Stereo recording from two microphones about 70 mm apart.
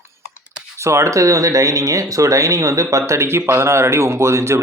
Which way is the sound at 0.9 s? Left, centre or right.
Right.